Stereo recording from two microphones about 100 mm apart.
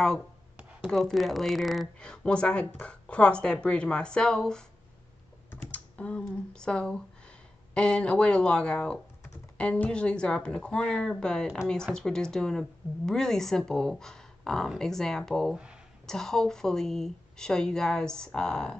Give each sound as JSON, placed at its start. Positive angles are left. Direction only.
{"t": 0.8, "sound": "speech", "side_deg": 0}
{"t": 15.5, "sound": "speech", "side_deg": -10}
{"t": 16.1, "sound": "speech", "side_deg": 5}